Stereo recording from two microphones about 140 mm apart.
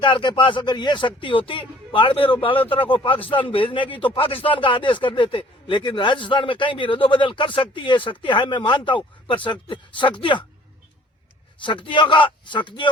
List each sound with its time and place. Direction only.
0.0 s speech: 35° left (ahead or behind)
11.6 s speech: 35° left (ahead or behind)